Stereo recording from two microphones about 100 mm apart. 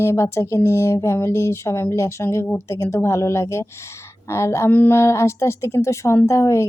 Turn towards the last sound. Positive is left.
turn(degrees=30)  # may be behind; listen again after turning